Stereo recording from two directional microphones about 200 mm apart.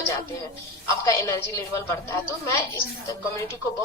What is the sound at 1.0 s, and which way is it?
A woman's voice, 15° left (ahead or behind).